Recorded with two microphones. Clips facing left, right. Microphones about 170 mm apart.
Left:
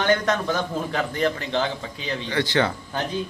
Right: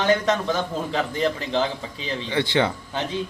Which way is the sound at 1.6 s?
25° right (ahead or behind).